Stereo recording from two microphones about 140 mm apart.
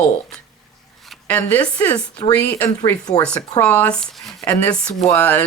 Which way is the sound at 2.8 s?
25° left (ahead or behind).